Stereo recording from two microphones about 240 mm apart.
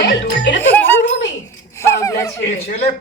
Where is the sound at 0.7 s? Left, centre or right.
Centre.